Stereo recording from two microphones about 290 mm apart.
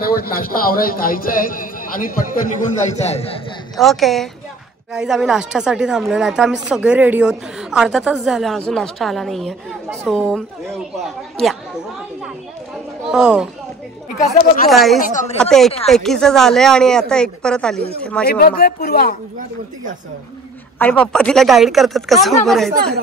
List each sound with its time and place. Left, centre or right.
0.0 s a man's voice: left
3.7 s speech: centre
13.0 s speech: centre
14.7 s speech: centre
15.0 s a man's voice: left
15.4 s speech: centre
18.2 s speech: left
20.8 s speech: centre